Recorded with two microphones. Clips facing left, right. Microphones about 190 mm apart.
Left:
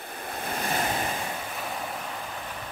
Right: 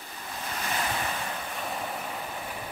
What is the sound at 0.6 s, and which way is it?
Waves, 35° left (ahead or behind).